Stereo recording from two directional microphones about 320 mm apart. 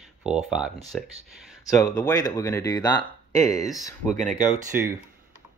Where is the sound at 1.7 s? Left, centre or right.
Centre.